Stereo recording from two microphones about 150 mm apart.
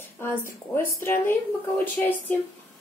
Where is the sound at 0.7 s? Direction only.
15° left (ahead or behind).